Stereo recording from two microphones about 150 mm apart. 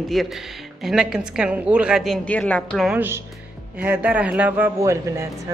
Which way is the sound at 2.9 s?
15° right (ahead or behind).